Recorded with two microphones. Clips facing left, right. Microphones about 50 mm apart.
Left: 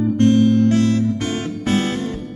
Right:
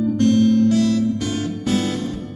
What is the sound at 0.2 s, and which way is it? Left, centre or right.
Music, left.